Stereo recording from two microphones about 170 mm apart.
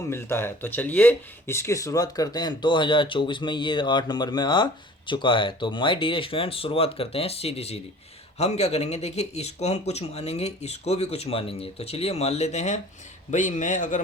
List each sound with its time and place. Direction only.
0.1 s speech: 15° left (ahead or behind); by 14.0 s 45° left (ahead or behind)